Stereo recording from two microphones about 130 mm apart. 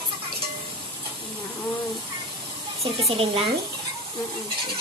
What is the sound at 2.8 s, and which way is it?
Speech, 50° right (ahead or behind).